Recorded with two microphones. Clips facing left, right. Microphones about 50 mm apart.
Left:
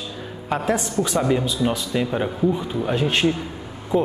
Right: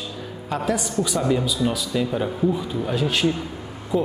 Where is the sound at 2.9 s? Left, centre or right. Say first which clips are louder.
Left 2 dB; left.